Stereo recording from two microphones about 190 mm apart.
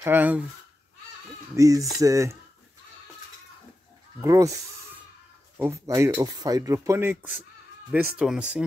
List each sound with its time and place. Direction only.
0.0 s speech: 10° right (ahead or behind)
1.5 s speech: 15° right (ahead or behind)
4.2 s speech: 15° right (ahead or behind)
5.6 s speech: 15° right (ahead or behind)